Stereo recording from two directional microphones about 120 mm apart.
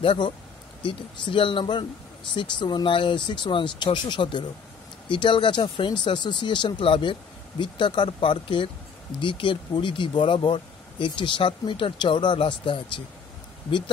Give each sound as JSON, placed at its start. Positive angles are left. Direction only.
{"t": 0.0, "sound": "speech", "side_deg": 45}